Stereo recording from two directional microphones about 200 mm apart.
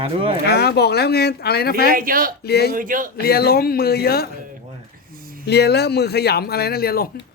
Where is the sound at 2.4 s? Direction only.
55° left (ahead or behind).